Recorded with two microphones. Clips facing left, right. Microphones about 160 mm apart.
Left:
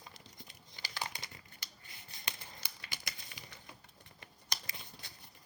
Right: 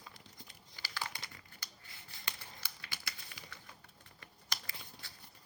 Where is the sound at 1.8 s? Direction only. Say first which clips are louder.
Left 1 dB; 20° left (ahead or behind).